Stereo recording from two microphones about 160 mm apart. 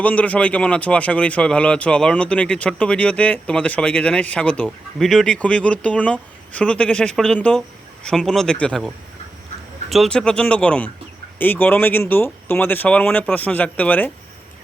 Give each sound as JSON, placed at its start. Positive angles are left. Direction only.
{"t": 0.0, "sound": "speech", "side_deg": 10}
{"t": 9.9, "sound": "speech", "side_deg": 5}